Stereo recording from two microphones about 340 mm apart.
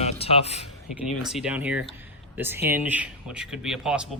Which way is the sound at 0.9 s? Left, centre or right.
Centre.